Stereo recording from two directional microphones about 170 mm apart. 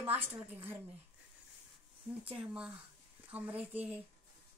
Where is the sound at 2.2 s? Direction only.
10° right (ahead or behind).